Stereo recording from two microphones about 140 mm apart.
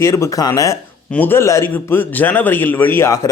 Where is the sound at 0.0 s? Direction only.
20° left (ahead or behind).